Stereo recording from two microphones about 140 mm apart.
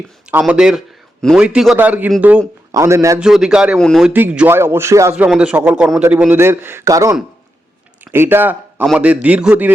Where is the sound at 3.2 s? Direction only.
5° right (ahead or behind).